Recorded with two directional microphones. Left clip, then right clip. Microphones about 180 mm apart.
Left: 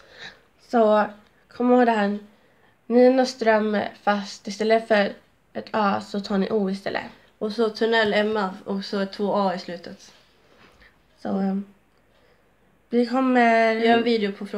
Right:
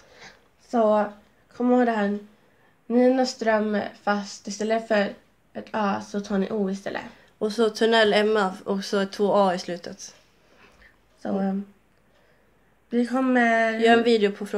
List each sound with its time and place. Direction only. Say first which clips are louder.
0.2 s a sound: left 7 dB; 25° left (ahead or behind)
1.5 s speech: left 3 dB; 15° left (ahead or behind)
7.3 s speech: right 1 dB; 35° right (ahead or behind)
11.2 s speech: even; 15° left (ahead or behind)
12.9 s speech: left 2 dB; 15° left (ahead or behind)
13.7 s speech: right 1 dB; 30° right (ahead or behind)